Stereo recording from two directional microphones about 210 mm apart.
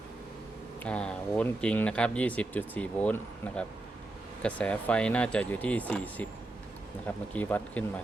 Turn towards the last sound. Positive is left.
turn(degrees=10)  # may be behind; listen again after turning